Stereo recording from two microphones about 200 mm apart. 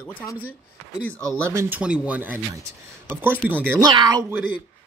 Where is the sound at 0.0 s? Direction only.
10° left (ahead or behind).